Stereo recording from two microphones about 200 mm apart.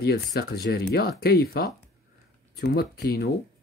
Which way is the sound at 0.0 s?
55° left (ahead or behind).